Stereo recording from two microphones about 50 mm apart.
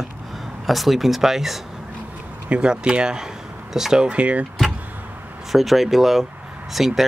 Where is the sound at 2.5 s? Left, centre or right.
Centre.